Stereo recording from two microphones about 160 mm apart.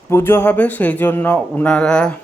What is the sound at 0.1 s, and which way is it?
Speech, 15° left (ahead or behind).